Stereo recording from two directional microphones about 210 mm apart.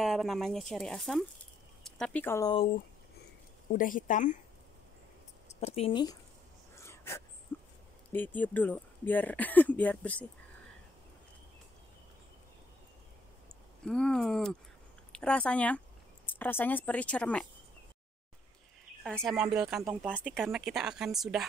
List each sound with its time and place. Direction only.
0.0 s speech: centre (ahead or behind)
3.7 s speech: 40° left (ahead or behind)
5.6 s speech: 30° left (ahead or behind)
6.7 s dog: 15° left (ahead or behind)
7.5 s a sound: 10° left (ahead or behind)
8.1 s speech: 10° left (ahead or behind)
13.8 s speech: 5° left (ahead or behind)
19.0 s speech: centre (ahead or behind)